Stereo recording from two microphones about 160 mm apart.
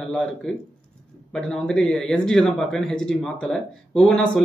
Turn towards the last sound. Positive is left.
turn(degrees=5)  # may be behind; listen again after turning